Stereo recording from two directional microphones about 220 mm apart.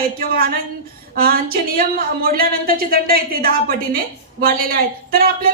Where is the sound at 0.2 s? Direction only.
45° right (ahead or behind).